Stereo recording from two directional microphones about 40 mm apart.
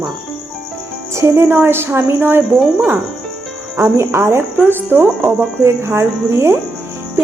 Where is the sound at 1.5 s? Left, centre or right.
Right.